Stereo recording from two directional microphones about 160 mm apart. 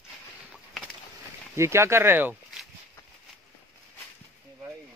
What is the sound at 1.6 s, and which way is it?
Speech, 15° right (ahead or behind).